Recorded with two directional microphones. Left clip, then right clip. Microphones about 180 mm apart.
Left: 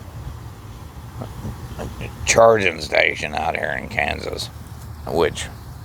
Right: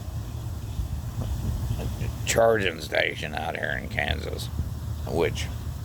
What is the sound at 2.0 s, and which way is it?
Speech, 20° left (ahead or behind).